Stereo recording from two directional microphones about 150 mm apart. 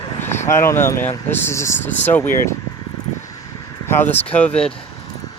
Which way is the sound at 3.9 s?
15° left (ahead or behind).